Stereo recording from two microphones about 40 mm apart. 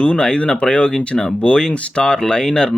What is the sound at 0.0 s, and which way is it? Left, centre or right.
Speech, left.